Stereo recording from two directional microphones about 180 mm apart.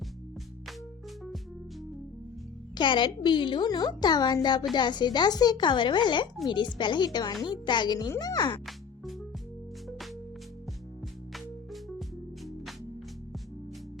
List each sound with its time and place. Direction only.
2.7 s a woman's voice: 25° left (ahead or behind)
11.3 s music: centre (ahead or behind)